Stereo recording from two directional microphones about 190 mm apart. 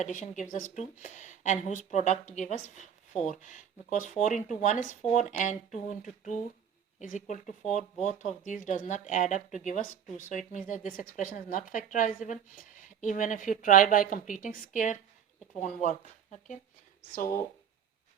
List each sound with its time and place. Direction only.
0.0 s a woman's voice: 40° left (ahead or behind)